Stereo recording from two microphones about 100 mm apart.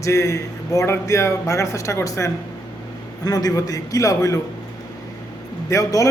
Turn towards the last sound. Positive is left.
turn(degrees=35)  # may be behind; listen again after turning